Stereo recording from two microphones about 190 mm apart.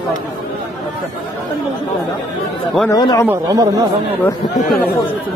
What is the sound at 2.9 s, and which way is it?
Speech, 20° left (ahead or behind).